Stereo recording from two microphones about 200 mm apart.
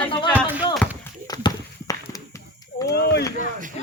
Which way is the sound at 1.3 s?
20° left (ahead or behind).